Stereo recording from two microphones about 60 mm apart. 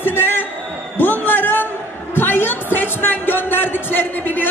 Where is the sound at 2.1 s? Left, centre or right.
Left.